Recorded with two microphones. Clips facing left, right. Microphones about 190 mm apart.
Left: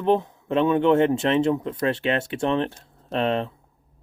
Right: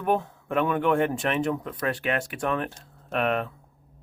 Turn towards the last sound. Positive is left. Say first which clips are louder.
# left 2 dB
turn(degrees=25)  # may be behind; listen again after turning